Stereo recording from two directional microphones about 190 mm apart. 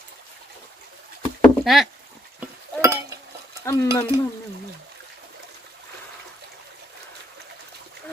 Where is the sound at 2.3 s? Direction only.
15° right (ahead or behind).